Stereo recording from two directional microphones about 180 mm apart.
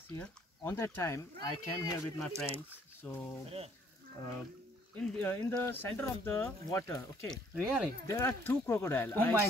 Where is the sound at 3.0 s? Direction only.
10° left (ahead or behind).